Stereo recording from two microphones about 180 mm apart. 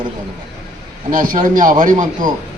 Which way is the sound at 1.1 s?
50° right (ahead or behind).